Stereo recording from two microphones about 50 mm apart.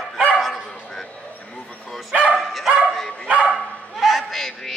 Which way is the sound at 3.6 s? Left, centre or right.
Left.